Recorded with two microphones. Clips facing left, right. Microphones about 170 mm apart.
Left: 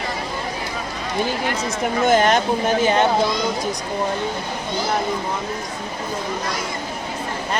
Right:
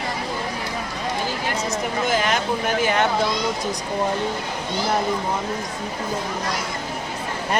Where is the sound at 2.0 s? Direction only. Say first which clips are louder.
Left 7 dB; 45° left (ahead or behind).